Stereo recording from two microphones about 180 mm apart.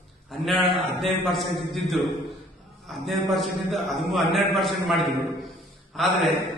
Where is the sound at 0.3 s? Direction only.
Centre (ahead or behind).